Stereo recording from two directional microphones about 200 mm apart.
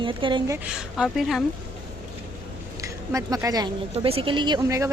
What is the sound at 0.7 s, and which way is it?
Speech, centre (ahead or behind).